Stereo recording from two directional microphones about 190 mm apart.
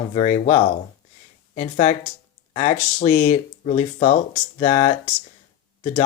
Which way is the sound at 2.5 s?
25° left (ahead or behind).